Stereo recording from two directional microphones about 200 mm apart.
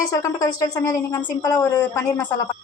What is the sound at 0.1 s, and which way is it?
A woman's voice, 15° left (ahead or behind).